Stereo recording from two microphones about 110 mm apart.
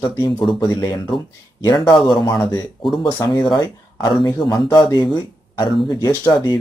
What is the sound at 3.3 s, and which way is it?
Speech, 40° left (ahead or behind).